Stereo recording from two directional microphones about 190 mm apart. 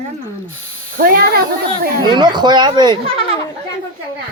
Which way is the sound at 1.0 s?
55° right (ahead or behind).